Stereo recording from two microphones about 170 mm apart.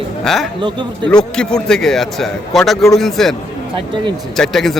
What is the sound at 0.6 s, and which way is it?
Speech, 25° right (ahead or behind).